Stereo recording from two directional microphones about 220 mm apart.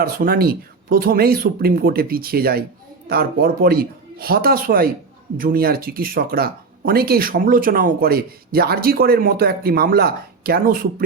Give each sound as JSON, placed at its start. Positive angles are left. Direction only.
{"t": 0.0, "sound": "speech", "side_deg": -45}